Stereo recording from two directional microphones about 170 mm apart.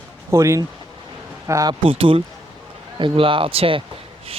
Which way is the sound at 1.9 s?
30° right (ahead or behind).